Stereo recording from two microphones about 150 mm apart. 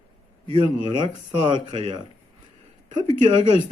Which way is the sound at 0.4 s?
35° right (ahead or behind).